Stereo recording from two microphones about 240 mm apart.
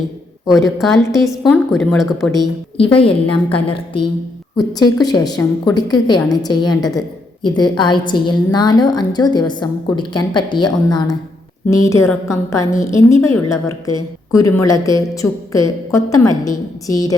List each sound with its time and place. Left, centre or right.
0.4 s a woman's voice: centre
2.7 s a woman's voice: left